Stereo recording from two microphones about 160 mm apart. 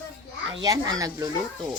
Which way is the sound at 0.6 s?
20° right (ahead or behind).